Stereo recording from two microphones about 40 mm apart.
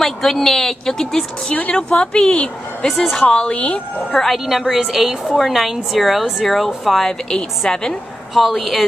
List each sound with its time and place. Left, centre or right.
0.0 s a woman's voice: centre
1.5 s a woman's voice: left
2.9 s a woman's voice: centre
3.3 s a woman's voice: centre
4.5 s a woman's voice: centre
8.4 s a woman's voice: centre